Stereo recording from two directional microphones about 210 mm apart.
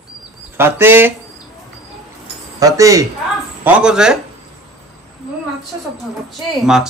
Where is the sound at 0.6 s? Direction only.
10° right (ahead or behind).